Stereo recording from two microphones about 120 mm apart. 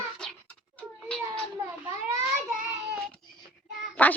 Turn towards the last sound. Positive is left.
turn(degrees=10)  # may be behind; listen again after turning